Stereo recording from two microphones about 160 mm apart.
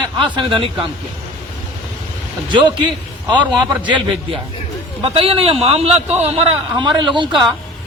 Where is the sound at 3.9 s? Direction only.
30° right (ahead or behind).